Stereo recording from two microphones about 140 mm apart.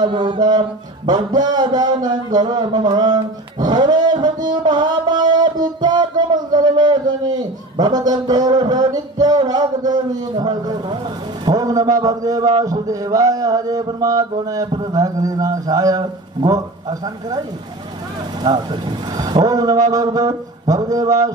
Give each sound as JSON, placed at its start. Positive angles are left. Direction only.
{"t": 0.0, "sound": "mantra", "side_deg": -35}
{"t": 5.8, "sound": "a sound", "side_deg": -30}
{"t": 11.4, "sound": "a man's voice", "side_deg": -25}
{"t": 18.4, "sound": "a man's voice", "side_deg": -30}